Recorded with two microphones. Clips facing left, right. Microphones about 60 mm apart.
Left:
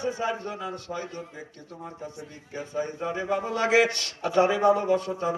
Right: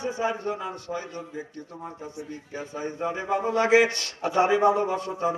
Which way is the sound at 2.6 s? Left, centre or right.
Centre.